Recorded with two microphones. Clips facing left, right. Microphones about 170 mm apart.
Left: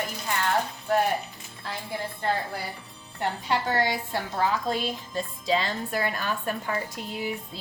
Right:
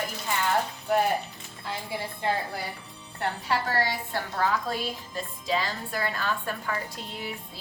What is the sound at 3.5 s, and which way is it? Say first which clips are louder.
Speech: left 1 dB; 20° left (ahead or behind).